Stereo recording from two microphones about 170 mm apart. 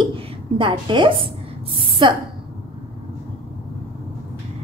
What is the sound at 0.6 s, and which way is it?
A woman's voice, 30° right (ahead or behind).